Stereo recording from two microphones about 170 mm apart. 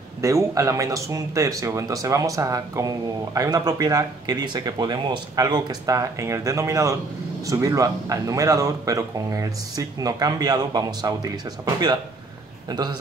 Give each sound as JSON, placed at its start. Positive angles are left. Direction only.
{"t": 0.2, "sound": "speech", "side_deg": -20}